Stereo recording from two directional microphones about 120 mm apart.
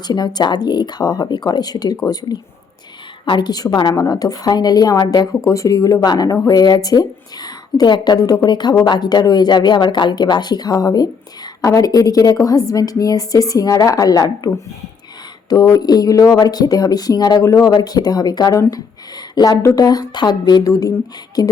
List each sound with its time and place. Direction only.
0.1 s a woman's voice: 35° left (ahead or behind)